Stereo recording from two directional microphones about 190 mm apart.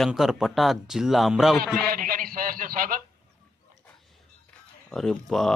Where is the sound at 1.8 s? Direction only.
50° right (ahead or behind).